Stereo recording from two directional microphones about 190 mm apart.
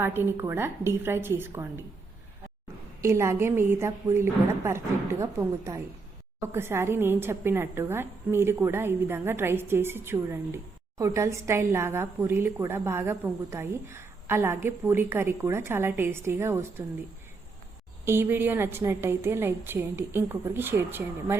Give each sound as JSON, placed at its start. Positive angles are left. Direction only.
{"t": 0.0, "sound": "a woman's voice", "side_deg": -10}
{"t": 3.0, "sound": "a woman's voice", "side_deg": -15}
{"t": 18.0, "sound": "a woman's voice", "side_deg": -10}